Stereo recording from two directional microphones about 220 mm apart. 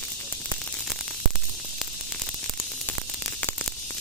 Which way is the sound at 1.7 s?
10° left (ahead or behind).